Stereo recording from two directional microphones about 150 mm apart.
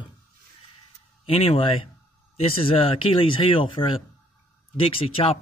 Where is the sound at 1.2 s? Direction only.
40° left (ahead or behind).